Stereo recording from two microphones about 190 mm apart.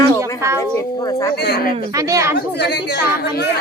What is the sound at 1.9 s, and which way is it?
Speech, 15° right (ahead or behind).